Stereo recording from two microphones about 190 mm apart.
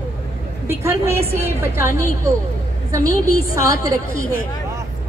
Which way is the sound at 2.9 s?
15° right (ahead or behind).